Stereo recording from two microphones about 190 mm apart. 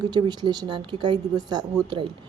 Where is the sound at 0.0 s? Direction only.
20° right (ahead or behind).